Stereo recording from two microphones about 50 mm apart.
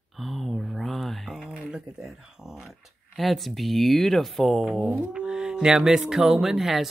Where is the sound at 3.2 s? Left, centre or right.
Centre.